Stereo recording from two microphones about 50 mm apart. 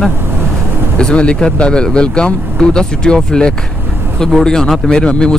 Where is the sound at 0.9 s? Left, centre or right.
Centre.